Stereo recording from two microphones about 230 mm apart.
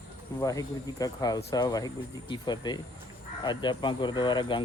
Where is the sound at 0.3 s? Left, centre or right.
Centre.